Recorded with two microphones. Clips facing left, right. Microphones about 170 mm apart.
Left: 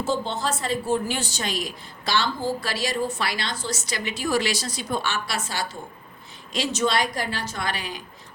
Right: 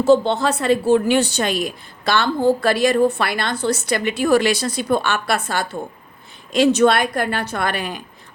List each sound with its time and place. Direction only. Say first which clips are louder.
0.0 s a woman's voice: right 11 dB; 65° right (ahead or behind)